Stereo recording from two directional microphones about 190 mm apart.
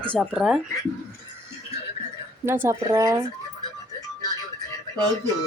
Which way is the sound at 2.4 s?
10° right (ahead or behind).